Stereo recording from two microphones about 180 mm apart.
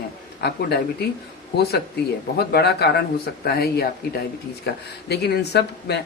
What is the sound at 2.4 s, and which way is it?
Speech, 60° left (ahead or behind).